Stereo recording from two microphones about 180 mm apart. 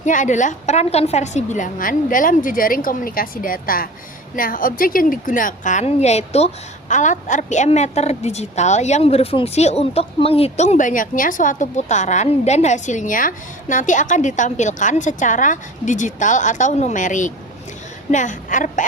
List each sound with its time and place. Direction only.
0.0 s a woman's voice: 45° left (ahead or behind)